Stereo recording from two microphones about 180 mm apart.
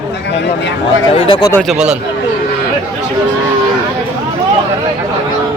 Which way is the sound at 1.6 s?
5° right (ahead or behind).